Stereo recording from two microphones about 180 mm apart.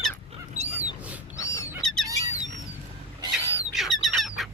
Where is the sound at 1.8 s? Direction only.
5° left (ahead or behind).